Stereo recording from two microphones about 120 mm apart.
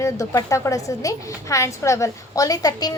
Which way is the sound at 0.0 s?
25° left (ahead or behind).